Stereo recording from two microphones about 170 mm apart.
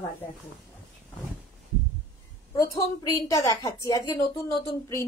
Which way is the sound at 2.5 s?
15° left (ahead or behind).